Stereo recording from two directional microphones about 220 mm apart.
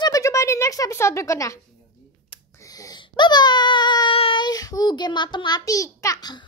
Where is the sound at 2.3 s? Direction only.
15° left (ahead or behind).